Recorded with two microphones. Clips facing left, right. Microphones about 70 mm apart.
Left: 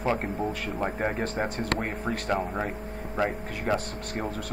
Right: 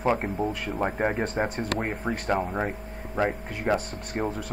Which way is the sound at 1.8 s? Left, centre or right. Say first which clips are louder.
Right 1 dB; centre.